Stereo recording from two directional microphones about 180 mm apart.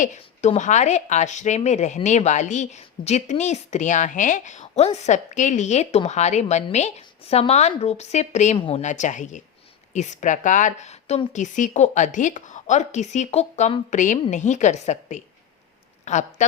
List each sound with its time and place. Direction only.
0.0 s a woman's voice: 40° left (ahead or behind)